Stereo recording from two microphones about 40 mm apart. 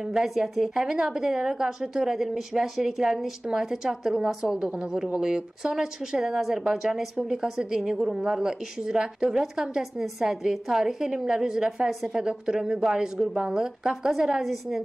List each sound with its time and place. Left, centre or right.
0.0 s speech: centre